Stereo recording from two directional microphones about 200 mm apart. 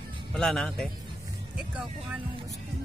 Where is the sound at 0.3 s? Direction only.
Centre (ahead or behind).